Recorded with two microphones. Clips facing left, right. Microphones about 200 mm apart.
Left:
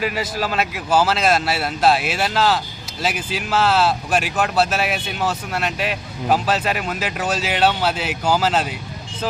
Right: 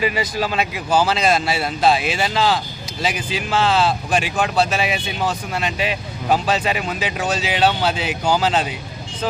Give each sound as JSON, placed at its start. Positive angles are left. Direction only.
{"t": 0.0, "sound": "speech", "side_deg": 0}